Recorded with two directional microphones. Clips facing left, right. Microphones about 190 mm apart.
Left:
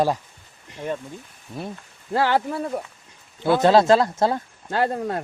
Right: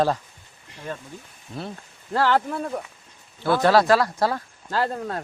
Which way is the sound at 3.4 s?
20° left (ahead or behind).